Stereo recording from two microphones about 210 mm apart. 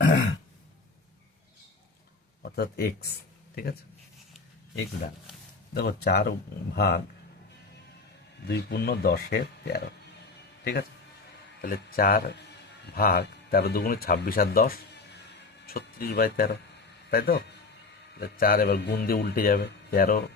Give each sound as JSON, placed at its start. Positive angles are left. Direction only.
{"t": 2.4, "sound": "speech", "side_deg": 50}
{"t": 5.7, "sound": "speech", "side_deg": 50}
{"t": 8.4, "sound": "speech", "side_deg": 50}